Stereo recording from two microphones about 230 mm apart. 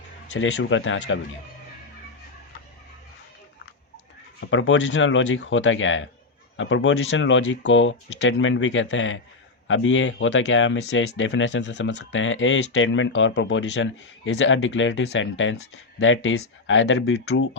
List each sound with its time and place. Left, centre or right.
0.3 s speech: left
4.4 s speech: left